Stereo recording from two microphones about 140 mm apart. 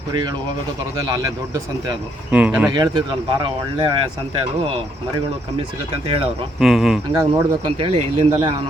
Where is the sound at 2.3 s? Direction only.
10° right (ahead or behind).